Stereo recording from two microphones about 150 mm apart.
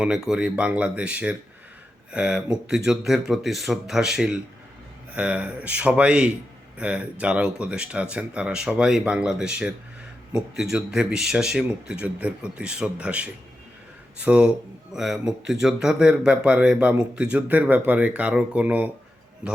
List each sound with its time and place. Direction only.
0.0 s speech: 5° right (ahead or behind)